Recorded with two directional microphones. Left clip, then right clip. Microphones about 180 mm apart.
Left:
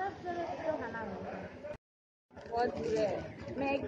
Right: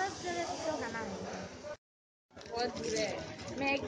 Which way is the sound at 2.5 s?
5° right (ahead or behind).